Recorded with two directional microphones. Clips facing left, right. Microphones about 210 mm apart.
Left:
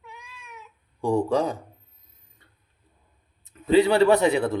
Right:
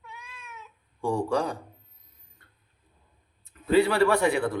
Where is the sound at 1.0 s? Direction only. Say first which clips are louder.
Left 4 dB; 20° left (ahead or behind).